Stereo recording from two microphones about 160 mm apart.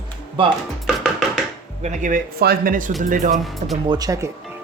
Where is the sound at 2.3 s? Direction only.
70° right (ahead or behind); by 3.3 s 55° right (ahead or behind).